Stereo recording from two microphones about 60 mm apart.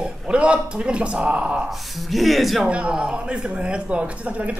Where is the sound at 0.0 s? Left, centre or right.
Centre.